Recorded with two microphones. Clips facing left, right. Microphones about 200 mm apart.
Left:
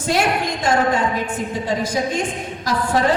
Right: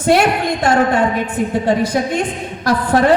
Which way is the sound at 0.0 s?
60° right (ahead or behind).